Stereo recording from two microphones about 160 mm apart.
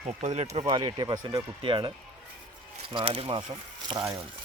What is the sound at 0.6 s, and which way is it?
Speech, 25° right (ahead or behind).